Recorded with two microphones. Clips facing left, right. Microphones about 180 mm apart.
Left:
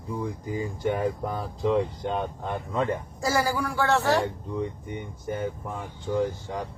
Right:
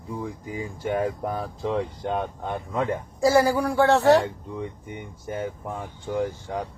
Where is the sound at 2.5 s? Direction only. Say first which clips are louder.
Right 1 dB; 15° right (ahead or behind).